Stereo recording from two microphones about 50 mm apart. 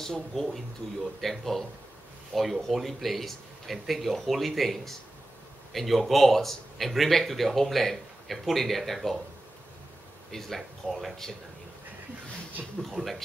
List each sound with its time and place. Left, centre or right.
0.0 s speech: centre
10.3 s speech: centre
12.6 s a man's voice: centre
12.9 s speech: centre